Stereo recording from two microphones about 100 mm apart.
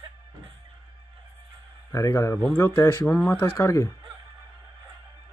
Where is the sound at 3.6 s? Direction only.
30° left (ahead or behind).